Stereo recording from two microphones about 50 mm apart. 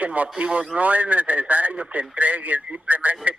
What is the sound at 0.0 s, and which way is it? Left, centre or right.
A man's voice, right.